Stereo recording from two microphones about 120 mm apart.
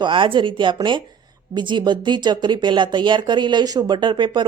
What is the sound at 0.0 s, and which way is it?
Speech, 45° right (ahead or behind).